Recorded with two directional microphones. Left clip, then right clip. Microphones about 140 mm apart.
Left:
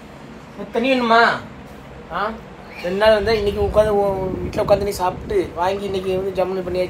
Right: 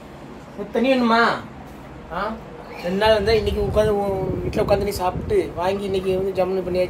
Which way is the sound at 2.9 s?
45° left (ahead or behind).